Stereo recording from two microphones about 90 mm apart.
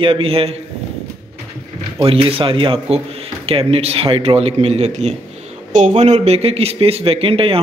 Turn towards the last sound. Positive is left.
turn(degrees=-90)